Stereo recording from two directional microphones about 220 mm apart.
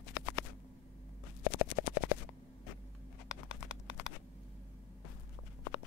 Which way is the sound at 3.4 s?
55° left (ahead or behind).